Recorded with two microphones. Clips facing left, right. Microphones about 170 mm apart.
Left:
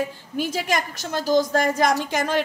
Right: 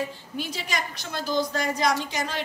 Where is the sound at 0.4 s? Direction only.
50° left (ahead or behind).